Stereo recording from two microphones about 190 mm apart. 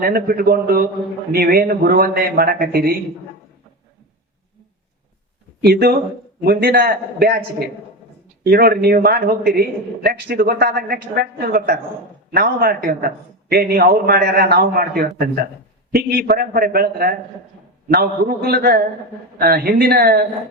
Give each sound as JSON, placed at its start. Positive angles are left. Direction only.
{"t": 0.0, "sound": "a man's voice", "side_deg": -50}
{"t": 5.6, "sound": "a man's voice", "side_deg": -55}
{"t": 8.4, "sound": "a man's voice", "side_deg": -55}